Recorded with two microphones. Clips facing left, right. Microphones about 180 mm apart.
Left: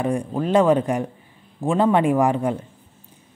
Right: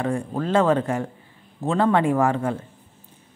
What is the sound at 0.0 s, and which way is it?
Speech, 15° left (ahead or behind).